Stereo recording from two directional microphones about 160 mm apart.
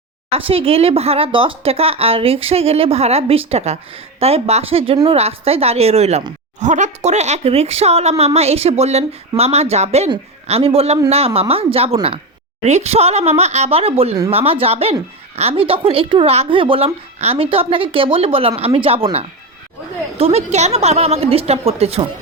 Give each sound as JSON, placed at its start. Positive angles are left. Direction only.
{"t": 0.3, "sound": "speech", "side_deg": -35}